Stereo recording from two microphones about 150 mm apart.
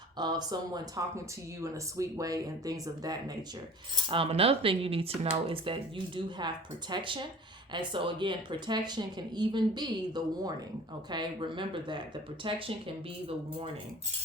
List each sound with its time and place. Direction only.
0.2 s speech: 25° right (ahead or behind)
3.9 s cutlery: 35° right (ahead or behind)
7.7 s speech: 30° right (ahead or behind)
11.1 s cutlery: 30° right (ahead or behind)